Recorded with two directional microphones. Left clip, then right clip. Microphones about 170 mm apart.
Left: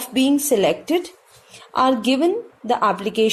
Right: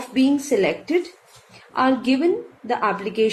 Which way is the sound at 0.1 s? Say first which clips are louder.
Left 2 dB; 45° left (ahead or behind).